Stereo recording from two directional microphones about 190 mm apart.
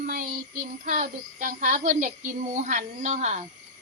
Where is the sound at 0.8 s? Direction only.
45° right (ahead or behind).